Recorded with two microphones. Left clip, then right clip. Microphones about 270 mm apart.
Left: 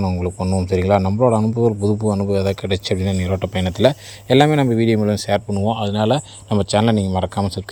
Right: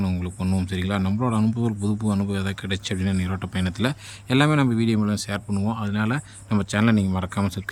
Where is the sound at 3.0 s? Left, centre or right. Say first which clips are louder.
Left 5 dB; right.